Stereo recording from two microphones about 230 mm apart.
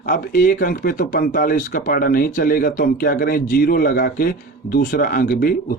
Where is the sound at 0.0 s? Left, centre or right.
Left.